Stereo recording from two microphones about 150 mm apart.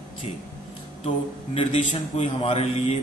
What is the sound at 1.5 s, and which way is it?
A man's voice, 40° left (ahead or behind).